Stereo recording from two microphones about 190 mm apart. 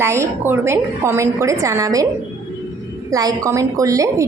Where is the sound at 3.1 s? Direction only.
20° right (ahead or behind).